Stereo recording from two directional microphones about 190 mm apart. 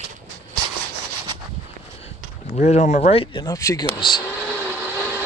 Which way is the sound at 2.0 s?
35° left (ahead or behind).